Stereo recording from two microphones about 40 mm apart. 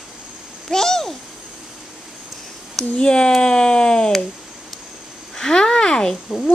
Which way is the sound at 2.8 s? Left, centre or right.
Centre.